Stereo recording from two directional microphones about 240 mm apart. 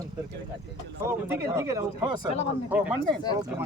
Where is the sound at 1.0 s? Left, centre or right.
Centre.